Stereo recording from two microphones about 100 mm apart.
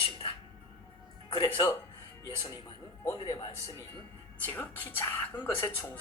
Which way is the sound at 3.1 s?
45° left (ahead or behind).